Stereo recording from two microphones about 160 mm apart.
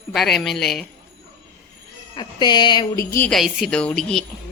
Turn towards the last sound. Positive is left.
turn(degrees=5)  # may be behind; listen again after turning